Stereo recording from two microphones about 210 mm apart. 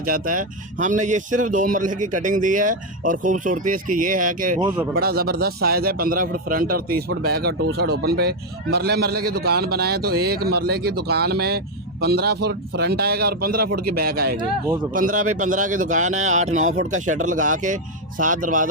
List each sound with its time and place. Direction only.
0.0 s a man's voice: 40° right (ahead or behind)